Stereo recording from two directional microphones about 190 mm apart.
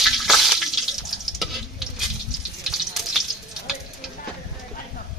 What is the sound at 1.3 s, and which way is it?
Stir, centre (ahead or behind).